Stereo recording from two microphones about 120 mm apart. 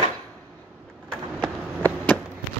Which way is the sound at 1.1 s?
10° left (ahead or behind).